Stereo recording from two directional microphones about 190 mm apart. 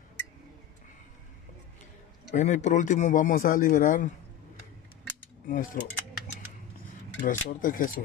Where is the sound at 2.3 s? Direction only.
40° left (ahead or behind).